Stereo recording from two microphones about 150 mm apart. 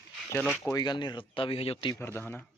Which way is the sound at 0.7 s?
30° left (ahead or behind).